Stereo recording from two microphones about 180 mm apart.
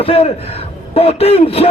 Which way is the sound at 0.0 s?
35° left (ahead or behind).